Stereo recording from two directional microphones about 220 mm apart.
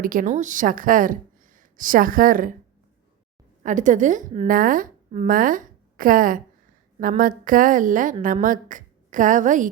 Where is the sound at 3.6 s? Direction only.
35° right (ahead or behind).